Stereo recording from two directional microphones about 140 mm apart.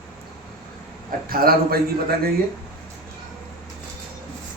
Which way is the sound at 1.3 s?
90° right.